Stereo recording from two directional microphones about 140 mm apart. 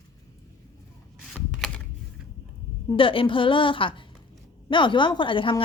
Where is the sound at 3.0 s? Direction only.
40° left (ahead or behind).